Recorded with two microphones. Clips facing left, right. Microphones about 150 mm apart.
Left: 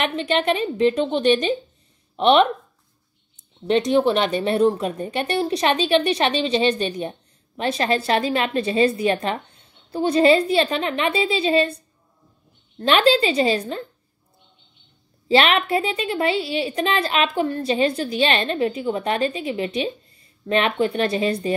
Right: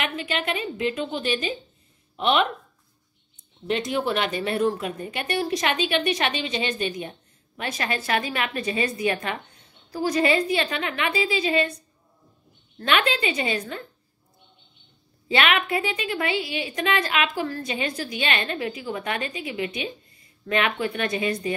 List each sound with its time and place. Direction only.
0.0 s speech: 35° left (ahead or behind)
3.6 s a woman's voice: 30° left (ahead or behind)
12.7 s speech: 30° left (ahead or behind)
15.2 s a woman's voice: 30° left (ahead or behind)